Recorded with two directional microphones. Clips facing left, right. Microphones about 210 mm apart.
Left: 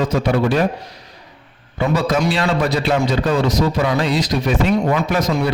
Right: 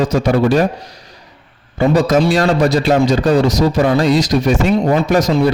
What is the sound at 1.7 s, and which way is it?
A man's voice, 45° right (ahead or behind).